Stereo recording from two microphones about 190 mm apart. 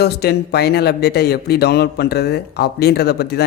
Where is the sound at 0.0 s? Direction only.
55° left (ahead or behind).